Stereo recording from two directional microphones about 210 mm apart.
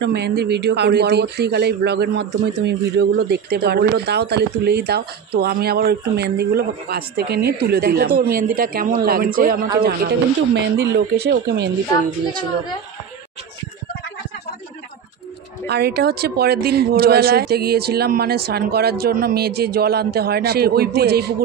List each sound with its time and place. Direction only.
0.0 s speech: 50° right (ahead or behind)
15.6 s speech: 50° right (ahead or behind)